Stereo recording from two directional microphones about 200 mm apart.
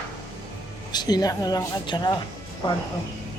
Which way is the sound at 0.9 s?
20° left (ahead or behind).